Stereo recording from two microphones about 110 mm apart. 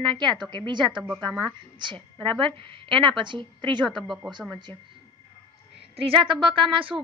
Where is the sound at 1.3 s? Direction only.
5° left (ahead or behind).